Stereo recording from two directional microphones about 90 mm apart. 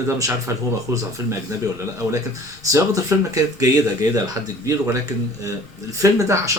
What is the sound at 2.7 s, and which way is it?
Speech, 35° right (ahead or behind).